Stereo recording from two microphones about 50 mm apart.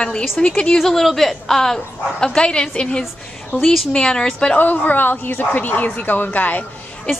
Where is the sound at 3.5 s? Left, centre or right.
Left.